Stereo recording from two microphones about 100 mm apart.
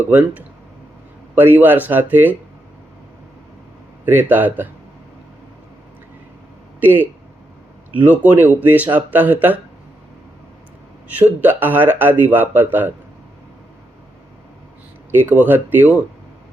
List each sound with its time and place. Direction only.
0.0 s speech: 15° right (ahead or behind)
4.0 s speech: 20° right (ahead or behind)
6.7 s speech: 20° right (ahead or behind)
11.1 s speech: 15° right (ahead or behind)
15.1 s speech: 20° right (ahead or behind)